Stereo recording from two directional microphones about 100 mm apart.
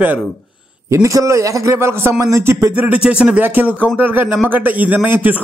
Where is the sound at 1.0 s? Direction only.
30° right (ahead or behind).